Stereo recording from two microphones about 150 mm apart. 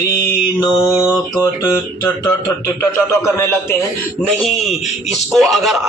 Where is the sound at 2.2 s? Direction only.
20° left (ahead or behind).